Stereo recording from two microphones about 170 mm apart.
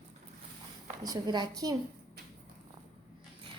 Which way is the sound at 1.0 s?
25° right (ahead or behind).